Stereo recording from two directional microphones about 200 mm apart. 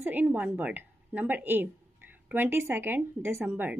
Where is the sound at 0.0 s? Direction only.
10° right (ahead or behind).